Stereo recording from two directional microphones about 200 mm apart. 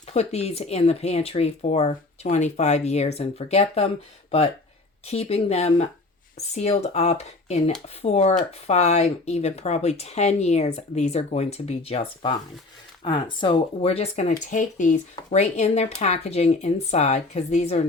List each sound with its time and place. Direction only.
0.1 s speech: 30° left (ahead or behind)
5.0 s speech: 30° left (ahead or behind)